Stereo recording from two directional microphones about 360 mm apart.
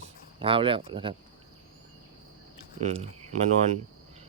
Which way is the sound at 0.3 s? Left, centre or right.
Centre.